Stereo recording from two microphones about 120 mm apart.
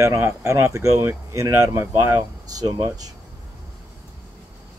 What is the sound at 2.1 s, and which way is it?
Speech, 30° right (ahead or behind).